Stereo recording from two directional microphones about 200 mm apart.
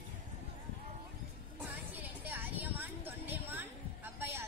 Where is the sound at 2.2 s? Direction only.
10° right (ahead or behind).